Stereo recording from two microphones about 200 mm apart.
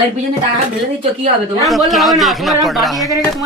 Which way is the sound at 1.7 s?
Centre (ahead or behind).